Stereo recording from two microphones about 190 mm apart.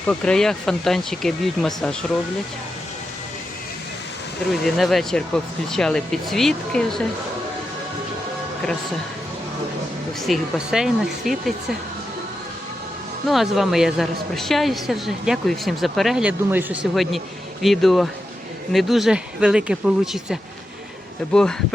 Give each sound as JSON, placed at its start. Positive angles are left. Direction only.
{"t": 0.1, "sound": "a woman's voice", "side_deg": 5}
{"t": 4.6, "sound": "a woman's voice", "side_deg": 0}
{"t": 10.2, "sound": "a woman's voice", "side_deg": 0}
{"t": 13.2, "sound": "a woman's voice", "side_deg": 0}